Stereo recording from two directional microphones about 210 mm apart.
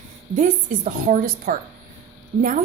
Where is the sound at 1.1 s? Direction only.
40° right (ahead or behind).